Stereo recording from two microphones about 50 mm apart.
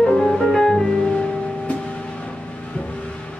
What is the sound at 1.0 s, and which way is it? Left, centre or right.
Music, left.